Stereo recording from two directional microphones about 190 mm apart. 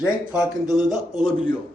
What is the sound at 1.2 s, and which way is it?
Speech, 20° left (ahead or behind).